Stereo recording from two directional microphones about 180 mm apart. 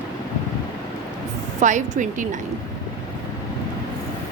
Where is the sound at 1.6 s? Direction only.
45° right (ahead or behind).